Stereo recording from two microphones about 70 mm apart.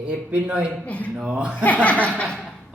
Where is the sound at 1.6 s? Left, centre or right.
Left.